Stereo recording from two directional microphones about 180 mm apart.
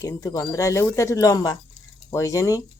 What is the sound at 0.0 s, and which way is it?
Speech, 20° left (ahead or behind).